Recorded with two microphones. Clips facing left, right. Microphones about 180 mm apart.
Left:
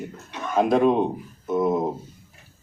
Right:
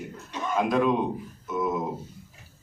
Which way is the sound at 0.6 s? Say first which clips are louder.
Left 5 dB; 45° left (ahead or behind).